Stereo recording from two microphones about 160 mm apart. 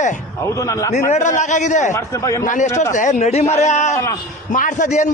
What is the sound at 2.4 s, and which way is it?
A man's voice, 50° left (ahead or behind).